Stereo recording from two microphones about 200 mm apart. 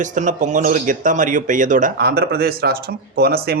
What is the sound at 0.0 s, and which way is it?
Speech, 40° right (ahead or behind).